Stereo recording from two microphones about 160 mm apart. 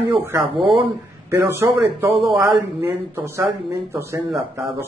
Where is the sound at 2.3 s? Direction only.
25° right (ahead or behind).